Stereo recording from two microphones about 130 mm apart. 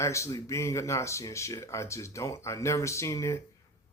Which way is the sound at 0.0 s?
25° left (ahead or behind).